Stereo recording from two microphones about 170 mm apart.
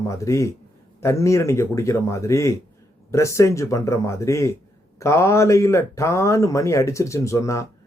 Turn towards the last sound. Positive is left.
turn(degrees=20)  # may be behind; listen again after turning